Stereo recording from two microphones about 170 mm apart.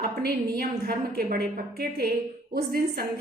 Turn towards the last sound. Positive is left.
turn(degrees=-65)  # may be behind; listen again after turning